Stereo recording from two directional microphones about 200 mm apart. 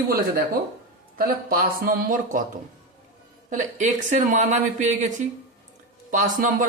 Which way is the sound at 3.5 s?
35° right (ahead or behind).